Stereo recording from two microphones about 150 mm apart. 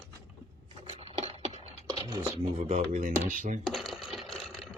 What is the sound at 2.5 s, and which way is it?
Speech, 60° right (ahead or behind).